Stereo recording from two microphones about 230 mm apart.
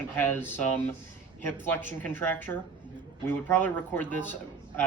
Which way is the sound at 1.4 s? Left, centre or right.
Centre.